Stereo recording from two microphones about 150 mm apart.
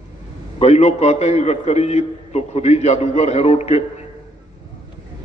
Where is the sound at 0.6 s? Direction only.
45° left (ahead or behind).